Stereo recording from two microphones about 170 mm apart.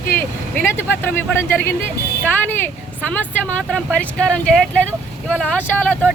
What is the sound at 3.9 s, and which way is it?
Speech, 5° left (ahead or behind).